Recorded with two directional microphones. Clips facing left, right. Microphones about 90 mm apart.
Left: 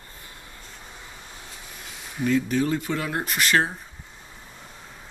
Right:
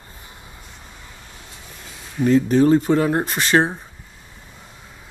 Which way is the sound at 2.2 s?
40° right (ahead or behind).